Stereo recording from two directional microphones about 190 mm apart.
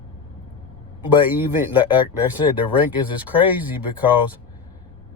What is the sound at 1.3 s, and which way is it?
Speech, 10° right (ahead or behind).